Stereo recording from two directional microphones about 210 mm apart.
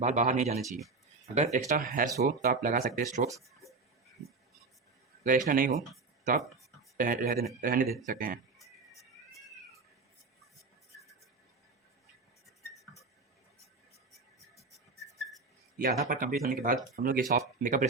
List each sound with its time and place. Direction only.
0.0 s speech: 35° right (ahead or behind)
5.2 s speech: 40° right (ahead or behind)
6.9 s speech: 40° right (ahead or behind)
15.8 s speech: 40° right (ahead or behind)